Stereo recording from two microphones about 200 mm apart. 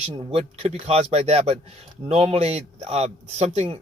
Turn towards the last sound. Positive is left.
turn(degrees=-35)  # may be behind; listen again after turning